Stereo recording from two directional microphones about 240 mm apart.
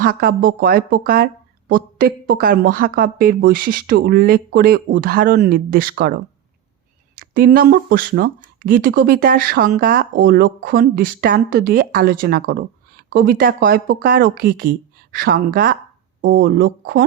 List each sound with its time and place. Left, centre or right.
0.0 s speech: right
7.2 s speech: right